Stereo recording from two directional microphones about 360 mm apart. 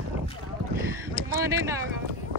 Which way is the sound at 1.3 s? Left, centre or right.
Centre.